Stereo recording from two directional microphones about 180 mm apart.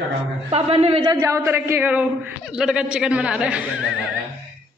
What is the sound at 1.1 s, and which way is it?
A man's voice, 15° right (ahead or behind).